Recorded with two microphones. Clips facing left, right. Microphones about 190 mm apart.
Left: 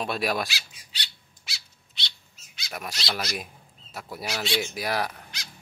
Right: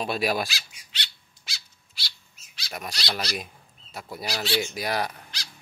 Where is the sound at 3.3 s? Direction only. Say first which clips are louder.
Right 1 dB; 35° right (ahead or behind).